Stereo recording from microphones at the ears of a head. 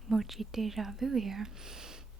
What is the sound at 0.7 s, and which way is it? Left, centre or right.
Speech, right.